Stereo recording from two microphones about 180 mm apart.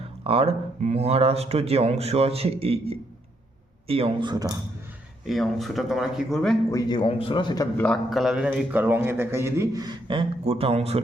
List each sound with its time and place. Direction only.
0.3 s a man's voice: 35° right (ahead or behind)
5.2 s speech: centre (ahead or behind)
6.7 s a man's voice: 20° left (ahead or behind)
7.8 s a man's voice: 5° left (ahead or behind); by 11.0 s 35° right (ahead or behind)